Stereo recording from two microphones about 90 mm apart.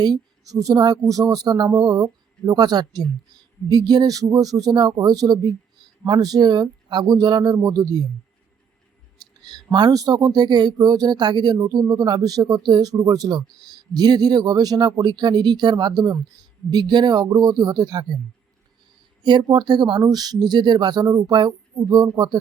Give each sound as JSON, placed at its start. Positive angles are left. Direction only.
{"t": 0.0, "sound": "speech", "side_deg": -45}
{"t": 9.4, "sound": "speech", "side_deg": -50}
{"t": 19.2, "sound": "speech", "side_deg": -55}